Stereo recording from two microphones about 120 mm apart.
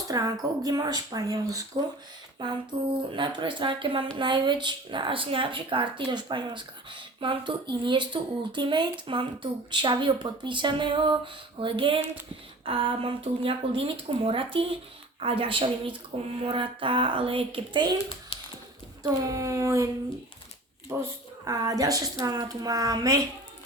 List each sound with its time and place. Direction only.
0.1 s a woman's voice: 30° right (ahead or behind)
2.4 s speech: 45° right (ahead or behind)
12.6 s a sound: 50° right (ahead or behind)
13.4 s speech: 50° right (ahead or behind)
18.3 s a sound: 50° left (ahead or behind)
19.0 s a woman's voice: 25° right (ahead or behind)
21.0 s a woman's voice: 30° right (ahead or behind)